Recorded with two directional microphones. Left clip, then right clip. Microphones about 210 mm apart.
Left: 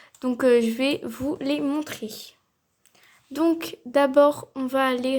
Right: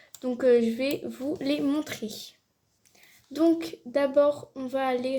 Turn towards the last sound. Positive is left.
turn(degrees=25)  # may be behind; listen again after turning